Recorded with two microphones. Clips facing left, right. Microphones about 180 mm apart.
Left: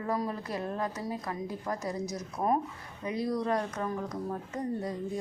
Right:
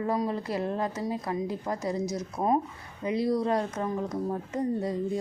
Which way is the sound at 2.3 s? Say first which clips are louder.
Right 2 dB; 20° right (ahead or behind).